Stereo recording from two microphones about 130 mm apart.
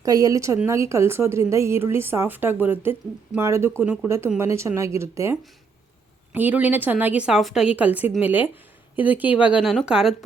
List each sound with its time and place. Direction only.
0.0 s a woman's voice: 25° right (ahead or behind); by 10.2 s 5° right (ahead or behind)